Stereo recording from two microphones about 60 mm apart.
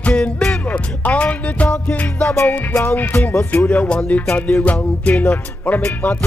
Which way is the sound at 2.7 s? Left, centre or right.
Left.